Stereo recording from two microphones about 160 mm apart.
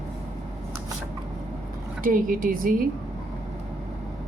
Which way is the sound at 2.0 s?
60° right (ahead or behind).